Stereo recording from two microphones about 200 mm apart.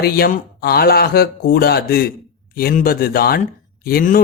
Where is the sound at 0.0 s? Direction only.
50° left (ahead or behind).